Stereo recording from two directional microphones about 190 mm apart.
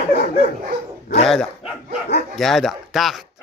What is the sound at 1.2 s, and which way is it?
Speech, centre (ahead or behind).